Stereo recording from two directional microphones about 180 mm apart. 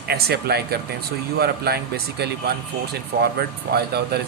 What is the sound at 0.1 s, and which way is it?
Speech, 60° right (ahead or behind).